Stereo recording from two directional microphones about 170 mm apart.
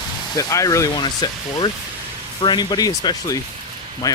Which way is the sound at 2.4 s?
25° left (ahead or behind).